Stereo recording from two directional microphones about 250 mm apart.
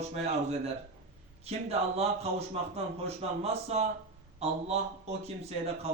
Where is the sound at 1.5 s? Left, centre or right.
Right.